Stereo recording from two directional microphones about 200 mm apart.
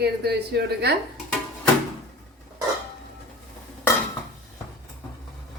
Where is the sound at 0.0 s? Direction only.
55° right (ahead or behind).